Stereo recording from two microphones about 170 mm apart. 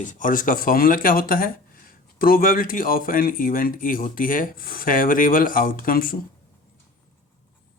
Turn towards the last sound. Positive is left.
turn(degrees=55)  # may be behind; listen again after turning